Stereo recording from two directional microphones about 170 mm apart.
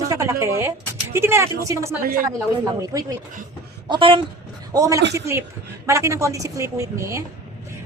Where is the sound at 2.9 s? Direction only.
20° right (ahead or behind).